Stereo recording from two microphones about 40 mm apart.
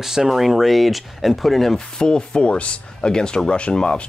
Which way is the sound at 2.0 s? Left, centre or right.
Left.